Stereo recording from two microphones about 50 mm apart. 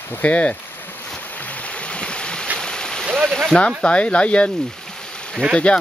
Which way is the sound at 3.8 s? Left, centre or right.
Left.